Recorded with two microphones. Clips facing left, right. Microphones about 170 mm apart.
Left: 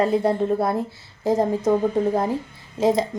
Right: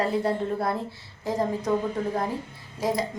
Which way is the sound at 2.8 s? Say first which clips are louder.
Left 7 dB; 25° left (ahead or behind).